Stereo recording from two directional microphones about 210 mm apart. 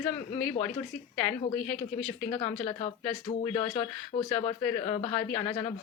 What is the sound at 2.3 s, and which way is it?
Speech, 30° left (ahead or behind).